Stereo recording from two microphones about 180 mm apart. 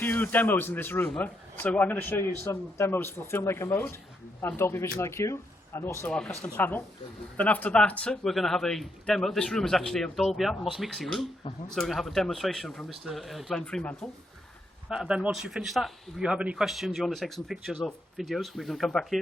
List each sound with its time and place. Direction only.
0.0 s a man's voice: 10° left (ahead or behind)